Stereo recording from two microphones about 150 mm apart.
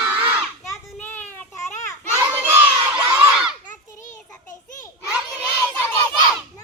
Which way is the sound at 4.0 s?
60° left (ahead or behind).